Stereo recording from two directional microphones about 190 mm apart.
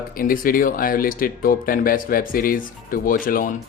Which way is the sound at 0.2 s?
50° left (ahead or behind).